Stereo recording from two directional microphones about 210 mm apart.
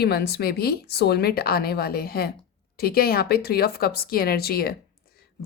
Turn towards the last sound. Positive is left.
turn(degrees=45)  # may be behind; listen again after turning